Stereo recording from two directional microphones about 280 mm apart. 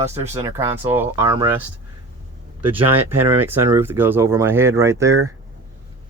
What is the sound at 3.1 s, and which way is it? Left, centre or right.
Speech, right.